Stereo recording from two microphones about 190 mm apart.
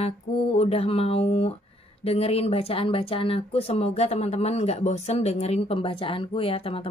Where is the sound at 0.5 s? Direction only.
30° left (ahead or behind).